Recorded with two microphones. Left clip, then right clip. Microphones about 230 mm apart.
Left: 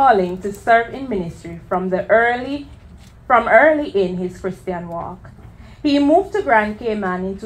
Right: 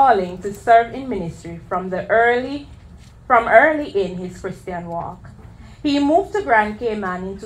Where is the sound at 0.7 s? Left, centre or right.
Left.